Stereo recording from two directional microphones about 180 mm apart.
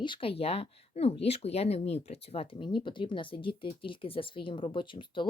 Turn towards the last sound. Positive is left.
turn(degrees=25)  # may be behind; listen again after turning